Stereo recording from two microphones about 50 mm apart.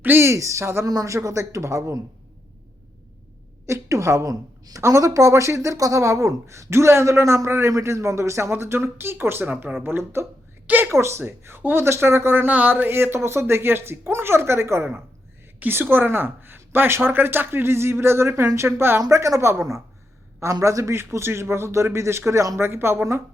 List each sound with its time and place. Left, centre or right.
0.2 s speech: right
3.7 s speech: right
8.4 s a man's voice: right
10.7 s a sound: right
11.2 s speech: right
12.5 s a sound: right
12.9 s speech: right
15.6 s a woman's voice: right
22.3 s a woman's voice: right
22.6 s a man's voice: right